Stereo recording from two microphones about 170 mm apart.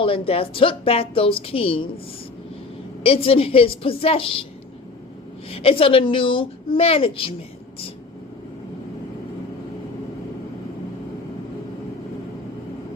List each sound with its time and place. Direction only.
0.0 s a woman's voice: 35° left (ahead or behind)
3.0 s a woman's voice: 35° left (ahead or behind)
5.5 s a woman's voice: 35° left (ahead or behind)